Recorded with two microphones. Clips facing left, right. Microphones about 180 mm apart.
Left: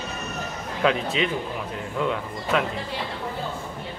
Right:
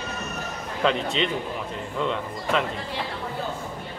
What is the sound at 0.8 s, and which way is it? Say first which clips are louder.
Speech: left 1 dB; 5° left (ahead or behind).